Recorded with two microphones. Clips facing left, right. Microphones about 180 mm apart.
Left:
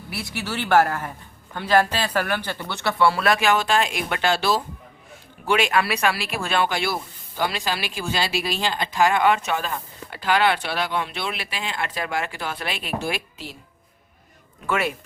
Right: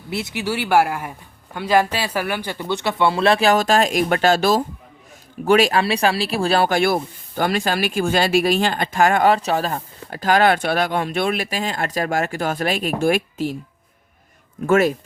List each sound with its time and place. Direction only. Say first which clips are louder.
0.1 s speech: right 6 dB; 20° right (ahead or behind); by 13.6 s 50° right (ahead or behind)
14.7 s speech: right 9 dB; 40° right (ahead or behind)